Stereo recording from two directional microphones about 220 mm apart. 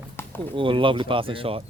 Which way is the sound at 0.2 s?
10° left (ahead or behind).